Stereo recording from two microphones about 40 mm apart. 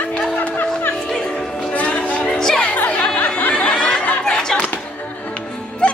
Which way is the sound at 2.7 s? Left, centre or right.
Left.